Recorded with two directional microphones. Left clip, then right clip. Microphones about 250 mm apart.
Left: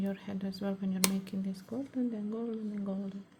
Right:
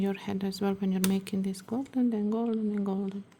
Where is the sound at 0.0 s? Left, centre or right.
Right.